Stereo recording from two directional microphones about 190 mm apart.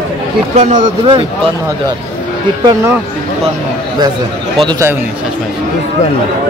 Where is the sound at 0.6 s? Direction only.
35° right (ahead or behind).